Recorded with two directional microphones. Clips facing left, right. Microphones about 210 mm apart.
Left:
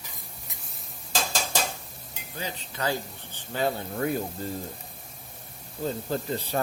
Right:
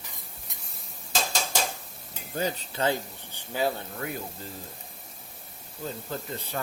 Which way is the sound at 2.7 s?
20° right (ahead or behind).